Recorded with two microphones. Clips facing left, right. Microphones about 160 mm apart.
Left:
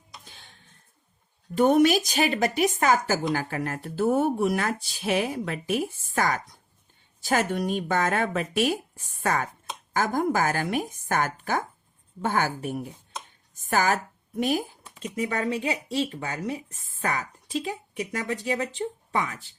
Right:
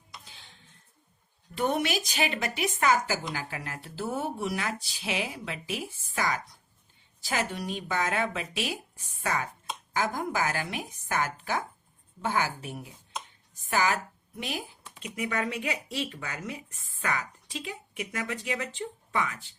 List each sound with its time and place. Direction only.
1.5 s speech: 45° left (ahead or behind)